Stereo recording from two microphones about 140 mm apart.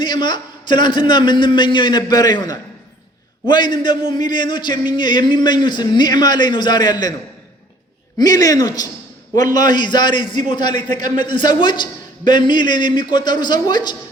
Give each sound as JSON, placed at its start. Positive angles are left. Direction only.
{"t": 0.0, "sound": "a man's voice", "side_deg": 30}
{"t": 8.2, "sound": "a man's voice", "side_deg": 25}